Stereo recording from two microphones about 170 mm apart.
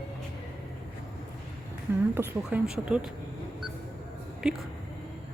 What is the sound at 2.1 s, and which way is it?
Speech, 10° right (ahead or behind).